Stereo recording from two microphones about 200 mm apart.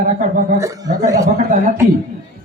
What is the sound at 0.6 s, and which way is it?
Speech, 15° right (ahead or behind).